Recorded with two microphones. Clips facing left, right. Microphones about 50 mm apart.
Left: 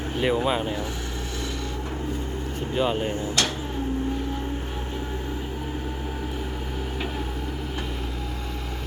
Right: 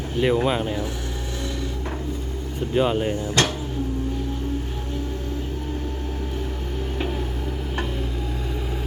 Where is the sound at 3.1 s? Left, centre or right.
Right.